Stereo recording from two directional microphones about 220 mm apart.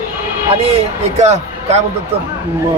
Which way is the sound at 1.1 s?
30° right (ahead or behind).